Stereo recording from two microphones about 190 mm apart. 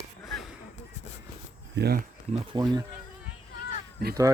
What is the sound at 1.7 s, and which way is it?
Speech, 55° right (ahead or behind).